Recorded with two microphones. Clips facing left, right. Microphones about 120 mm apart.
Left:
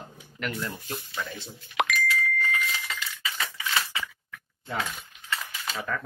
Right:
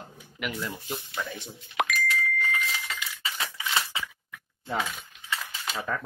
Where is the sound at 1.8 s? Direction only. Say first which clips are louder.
Left 1 dB; 90° left.